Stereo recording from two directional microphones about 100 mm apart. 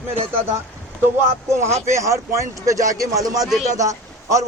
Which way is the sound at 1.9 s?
30° right (ahead or behind).